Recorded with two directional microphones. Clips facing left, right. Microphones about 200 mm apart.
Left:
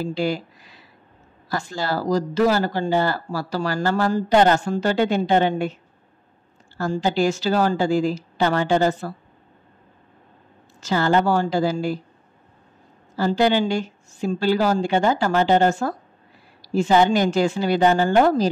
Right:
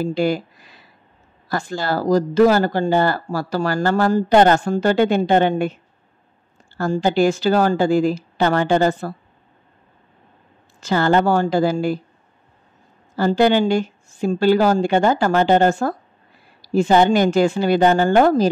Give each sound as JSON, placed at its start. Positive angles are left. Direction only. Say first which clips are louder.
{"t": 0.0, "sound": "speech", "louder": "right 4 dB", "side_deg": -50}
{"t": 1.5, "sound": "speech", "louder": "right 3 dB", "side_deg": -55}
{"t": 6.8, "sound": "a woman's voice", "louder": "right 4 dB", "side_deg": -55}
{"t": 10.8, "sound": "a woman's voice", "louder": "right 3 dB", "side_deg": -55}
{"t": 13.1, "sound": "a woman's voice", "louder": "right 3 dB", "side_deg": -55}